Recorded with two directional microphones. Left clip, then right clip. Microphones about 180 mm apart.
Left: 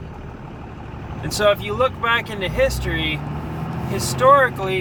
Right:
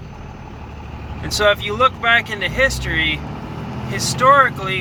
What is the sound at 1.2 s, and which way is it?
Speech, 15° left (ahead or behind).